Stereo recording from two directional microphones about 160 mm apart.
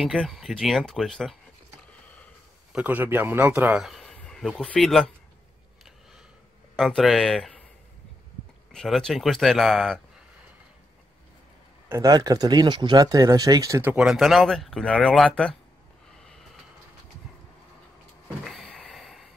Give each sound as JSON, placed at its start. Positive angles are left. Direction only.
{"t": 0.0, "sound": "speech", "side_deg": 0}
{"t": 2.7, "sound": "speech", "side_deg": -10}
{"t": 6.8, "sound": "speech", "side_deg": 5}
{"t": 8.7, "sound": "speech", "side_deg": 5}
{"t": 11.9, "sound": "speech", "side_deg": -20}
{"t": 13.9, "sound": "speech", "side_deg": 0}
{"t": 18.4, "sound": "a sound", "side_deg": 0}